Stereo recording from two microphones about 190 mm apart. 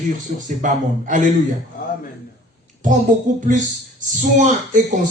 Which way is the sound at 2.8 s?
40° right (ahead or behind).